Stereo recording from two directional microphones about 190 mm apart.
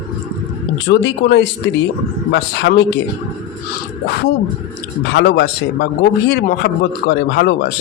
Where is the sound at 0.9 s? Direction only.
65° left (ahead or behind).